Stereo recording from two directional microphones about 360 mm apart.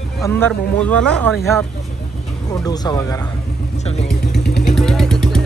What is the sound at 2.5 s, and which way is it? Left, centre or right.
Speech, centre.